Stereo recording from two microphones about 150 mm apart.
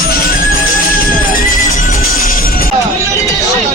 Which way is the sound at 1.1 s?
65° left (ahead or behind).